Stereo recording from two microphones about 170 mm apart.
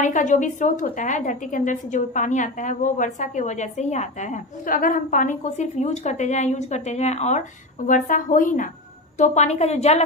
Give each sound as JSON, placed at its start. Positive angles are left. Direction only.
{"t": 0.0, "sound": "a woman's voice", "side_deg": 45}